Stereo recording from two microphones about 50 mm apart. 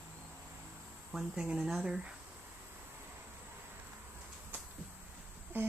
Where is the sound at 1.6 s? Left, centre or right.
Centre.